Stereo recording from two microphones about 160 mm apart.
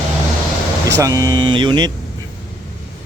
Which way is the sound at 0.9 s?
20° right (ahead or behind).